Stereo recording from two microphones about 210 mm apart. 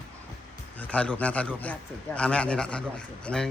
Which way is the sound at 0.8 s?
5° left (ahead or behind).